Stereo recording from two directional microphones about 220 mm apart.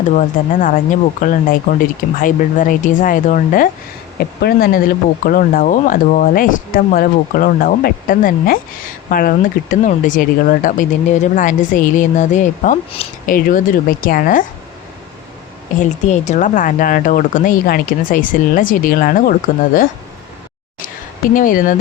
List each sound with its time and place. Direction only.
0.2 s speech: 40° left (ahead or behind)
15.8 s speech: 30° left (ahead or behind)
21.3 s speech: 40° left (ahead or behind)